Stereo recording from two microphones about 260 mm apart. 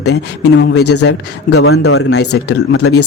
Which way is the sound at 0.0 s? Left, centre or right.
Left.